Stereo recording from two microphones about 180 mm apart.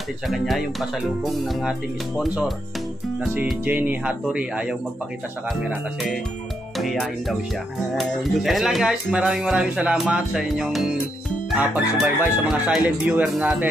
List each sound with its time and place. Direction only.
0.3 s speech: centre (ahead or behind)
6.8 s speech: centre (ahead or behind)